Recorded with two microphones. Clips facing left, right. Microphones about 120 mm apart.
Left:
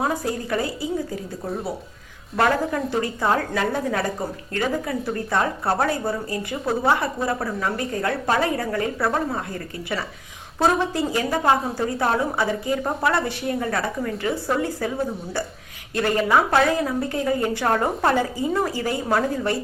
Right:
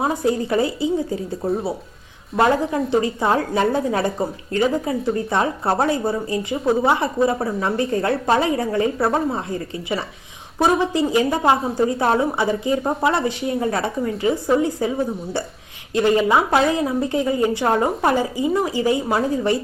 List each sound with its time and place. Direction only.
0.0 s a woman's voice: 25° right (ahead or behind)
2.4 s a woman's voice: 20° right (ahead or behind)
10.6 s a woman's voice: 15° right (ahead or behind)